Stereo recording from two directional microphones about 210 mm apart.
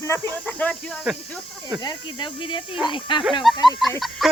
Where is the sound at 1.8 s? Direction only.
20° left (ahead or behind).